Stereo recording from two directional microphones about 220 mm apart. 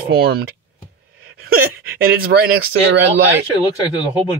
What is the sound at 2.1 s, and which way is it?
Speech, 45° right (ahead or behind).